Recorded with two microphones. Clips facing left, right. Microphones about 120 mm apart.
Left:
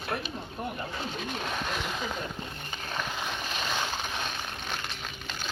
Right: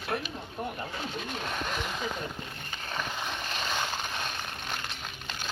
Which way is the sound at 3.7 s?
Centre (ahead or behind).